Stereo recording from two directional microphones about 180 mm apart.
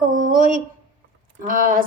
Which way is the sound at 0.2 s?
45° right (ahead or behind).